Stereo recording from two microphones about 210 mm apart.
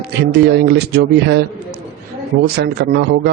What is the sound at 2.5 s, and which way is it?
Speech, 50° right (ahead or behind).